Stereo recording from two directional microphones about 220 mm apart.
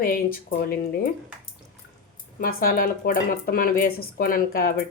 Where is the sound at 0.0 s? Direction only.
40° left (ahead or behind).